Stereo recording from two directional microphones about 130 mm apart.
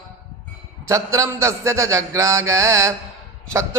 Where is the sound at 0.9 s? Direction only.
25° right (ahead or behind).